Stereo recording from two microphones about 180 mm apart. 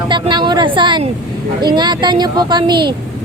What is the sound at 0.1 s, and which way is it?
Speech, 25° right (ahead or behind).